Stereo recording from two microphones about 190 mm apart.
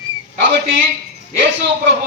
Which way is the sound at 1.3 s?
70° right (ahead or behind).